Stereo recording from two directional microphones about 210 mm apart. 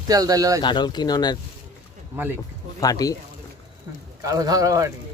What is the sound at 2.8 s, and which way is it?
Speech, 15° left (ahead or behind).